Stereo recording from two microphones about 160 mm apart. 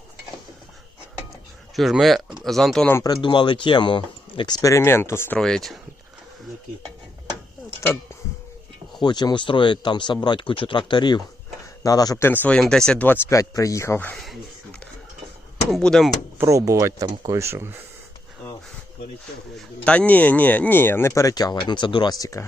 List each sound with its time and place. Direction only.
1.7 s speech: centre (ahead or behind)
2.9 s speech: 25° left (ahead or behind)
5.4 s speech: 5° left (ahead or behind)
9.0 s speech: 25° left (ahead or behind); by 16.1 s centre (ahead or behind)
16.4 s speech: 20° right (ahead or behind)
19.5 s speech: 5° left (ahead or behind)